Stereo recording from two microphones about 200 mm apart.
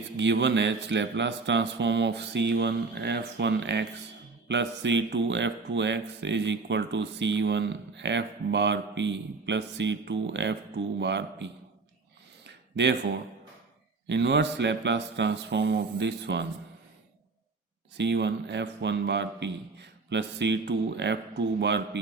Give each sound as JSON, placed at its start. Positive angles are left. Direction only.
{"t": 0.2, "sound": "speech", "side_deg": -60}
{"t": 12.7, "sound": "speech", "side_deg": -60}
{"t": 14.1, "sound": "speech", "side_deg": -60}
{"t": 17.9, "sound": "speech", "side_deg": -60}